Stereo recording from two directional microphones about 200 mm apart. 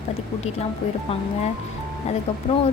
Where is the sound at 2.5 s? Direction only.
35° left (ahead or behind).